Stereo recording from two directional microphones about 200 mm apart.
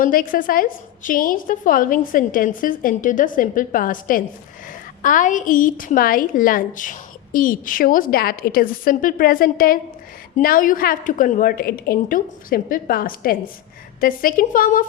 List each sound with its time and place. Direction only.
0.0 s a woman's voice: 45° left (ahead or behind)